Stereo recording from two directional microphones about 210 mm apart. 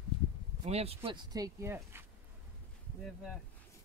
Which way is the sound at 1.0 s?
15° right (ahead or behind).